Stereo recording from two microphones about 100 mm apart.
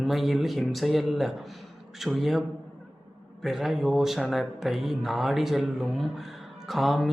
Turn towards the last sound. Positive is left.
turn(degrees=0)  # may be behind; listen again after turning